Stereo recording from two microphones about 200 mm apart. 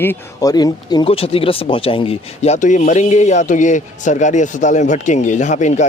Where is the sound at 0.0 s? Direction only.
15° left (ahead or behind).